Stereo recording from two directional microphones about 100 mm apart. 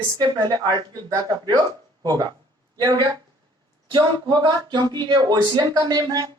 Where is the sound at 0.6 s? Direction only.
40° right (ahead or behind).